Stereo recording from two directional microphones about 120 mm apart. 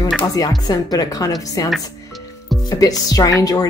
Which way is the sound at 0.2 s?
30° left (ahead or behind).